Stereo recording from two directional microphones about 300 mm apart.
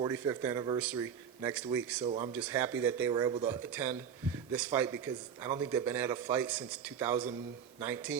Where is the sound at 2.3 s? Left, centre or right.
Centre.